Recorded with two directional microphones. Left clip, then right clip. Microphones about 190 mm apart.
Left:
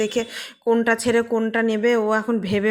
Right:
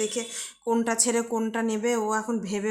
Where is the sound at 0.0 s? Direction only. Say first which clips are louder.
Left 7 dB; 20° left (ahead or behind).